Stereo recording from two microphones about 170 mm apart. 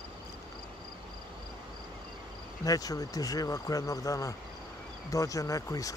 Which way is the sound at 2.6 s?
20° left (ahead or behind).